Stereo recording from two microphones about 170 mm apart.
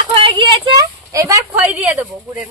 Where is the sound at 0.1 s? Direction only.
30° right (ahead or behind).